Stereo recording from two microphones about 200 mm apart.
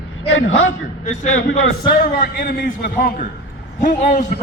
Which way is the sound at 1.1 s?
35° left (ahead or behind).